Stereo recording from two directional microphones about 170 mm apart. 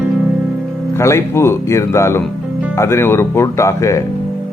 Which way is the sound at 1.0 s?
15° left (ahead or behind).